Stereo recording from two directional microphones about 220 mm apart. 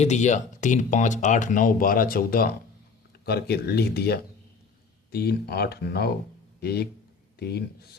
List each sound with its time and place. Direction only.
0.0 s speech: 30° left (ahead or behind)